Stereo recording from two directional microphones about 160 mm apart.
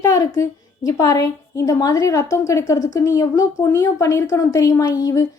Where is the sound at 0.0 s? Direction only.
20° left (ahead or behind).